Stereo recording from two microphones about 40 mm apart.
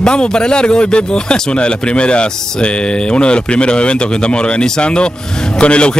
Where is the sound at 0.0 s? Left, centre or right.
Left.